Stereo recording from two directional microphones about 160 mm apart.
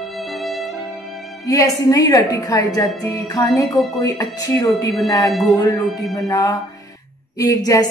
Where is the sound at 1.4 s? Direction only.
20° left (ahead or behind).